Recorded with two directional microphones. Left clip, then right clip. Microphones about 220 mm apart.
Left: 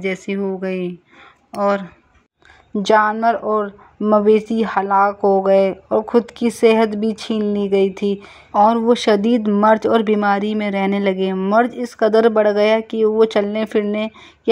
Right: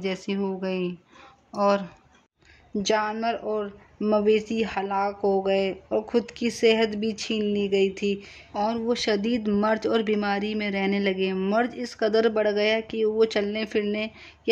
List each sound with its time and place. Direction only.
0.0 s speech: 15° left (ahead or behind)